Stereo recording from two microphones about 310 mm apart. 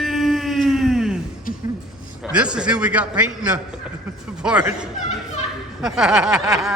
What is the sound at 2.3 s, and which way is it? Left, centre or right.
Speech, centre.